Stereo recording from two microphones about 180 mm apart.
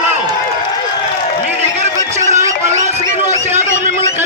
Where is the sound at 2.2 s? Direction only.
40° right (ahead or behind).